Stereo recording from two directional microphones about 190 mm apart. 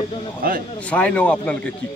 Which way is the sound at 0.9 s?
5° left (ahead or behind).